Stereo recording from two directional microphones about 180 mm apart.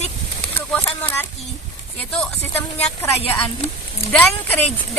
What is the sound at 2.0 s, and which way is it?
Speech, 10° left (ahead or behind).